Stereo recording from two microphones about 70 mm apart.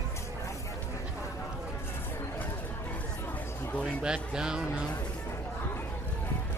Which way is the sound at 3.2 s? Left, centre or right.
Left.